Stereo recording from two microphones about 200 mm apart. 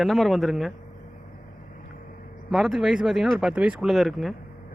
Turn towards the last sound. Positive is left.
turn(degrees=0)  # may be behind; listen again after turning